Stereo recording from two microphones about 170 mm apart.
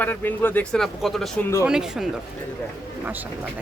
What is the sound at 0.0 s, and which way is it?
Speech, 10° left (ahead or behind).